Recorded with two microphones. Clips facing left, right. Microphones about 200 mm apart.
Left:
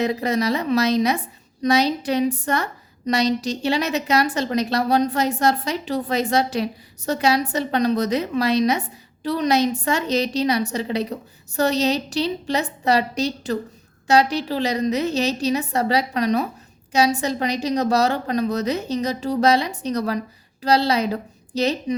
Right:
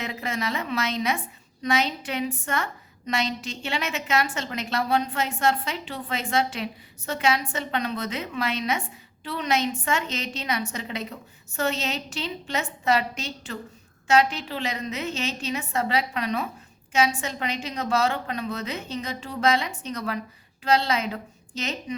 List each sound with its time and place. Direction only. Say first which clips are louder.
0.0 s a woman's voice: left 9 dB; 35° left (ahead or behind)